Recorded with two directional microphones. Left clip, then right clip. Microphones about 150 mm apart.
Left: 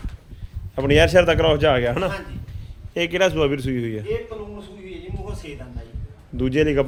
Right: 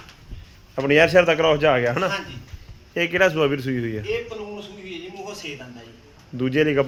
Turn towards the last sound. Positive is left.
turn(degrees=20)  # may be behind; listen again after turning